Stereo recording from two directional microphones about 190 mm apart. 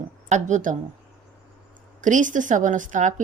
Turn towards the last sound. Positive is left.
turn(degrees=-40)  # may be behind; listen again after turning